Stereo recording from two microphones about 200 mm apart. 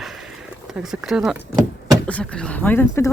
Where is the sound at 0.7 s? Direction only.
Centre (ahead or behind).